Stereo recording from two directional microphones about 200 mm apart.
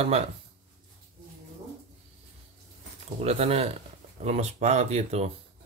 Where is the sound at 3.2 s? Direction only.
30° right (ahead or behind).